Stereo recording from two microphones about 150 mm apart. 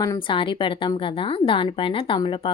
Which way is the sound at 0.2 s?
35° left (ahead or behind).